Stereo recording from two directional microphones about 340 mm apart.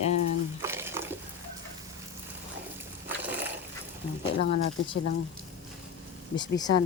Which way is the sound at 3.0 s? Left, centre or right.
Centre.